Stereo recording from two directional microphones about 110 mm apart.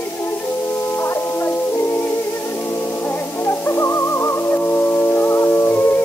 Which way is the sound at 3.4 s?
25° left (ahead or behind).